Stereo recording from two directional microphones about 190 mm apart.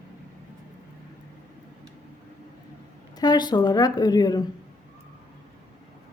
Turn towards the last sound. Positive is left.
turn(degrees=20)  # may be behind; listen again after turning